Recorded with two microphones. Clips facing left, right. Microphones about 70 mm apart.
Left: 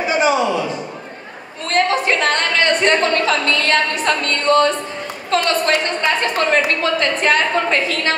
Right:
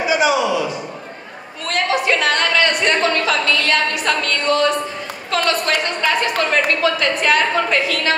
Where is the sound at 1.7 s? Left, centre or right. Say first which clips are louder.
Left 2 dB; left.